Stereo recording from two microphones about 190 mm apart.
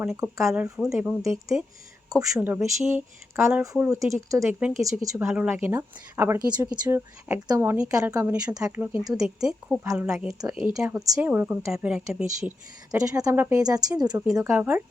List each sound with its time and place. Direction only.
0.2 s a woman's voice: 15° right (ahead or behind)
13.0 s a woman's voice: 20° right (ahead or behind)